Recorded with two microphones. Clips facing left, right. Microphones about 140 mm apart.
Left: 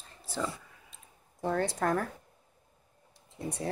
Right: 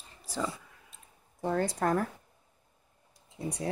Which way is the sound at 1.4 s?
5° right (ahead or behind).